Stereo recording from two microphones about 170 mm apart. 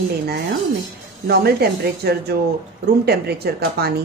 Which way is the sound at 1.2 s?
65° right (ahead or behind).